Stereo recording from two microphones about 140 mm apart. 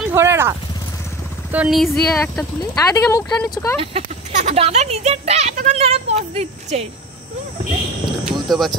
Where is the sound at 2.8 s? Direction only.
25° left (ahead or behind).